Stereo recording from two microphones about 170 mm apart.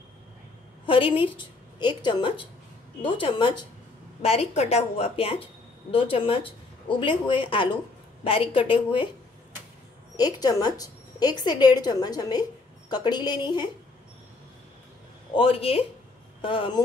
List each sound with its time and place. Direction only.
0.8 s a woman's voice: 30° left (ahead or behind)
10.1 s a woman's voice: 25° left (ahead or behind)
15.3 s a woman's voice: 35° left (ahead or behind)